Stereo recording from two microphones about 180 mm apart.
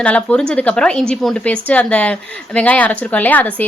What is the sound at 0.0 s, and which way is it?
Speech, 5° left (ahead or behind).